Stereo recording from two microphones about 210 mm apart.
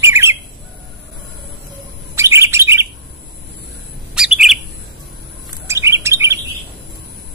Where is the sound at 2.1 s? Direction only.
10° right (ahead or behind).